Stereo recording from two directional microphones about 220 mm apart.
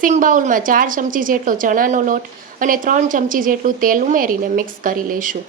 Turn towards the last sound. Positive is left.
turn(degrees=-40)  # may be behind; listen again after turning